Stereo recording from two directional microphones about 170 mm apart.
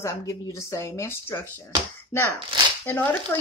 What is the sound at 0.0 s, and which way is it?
Speech, 20° left (ahead or behind).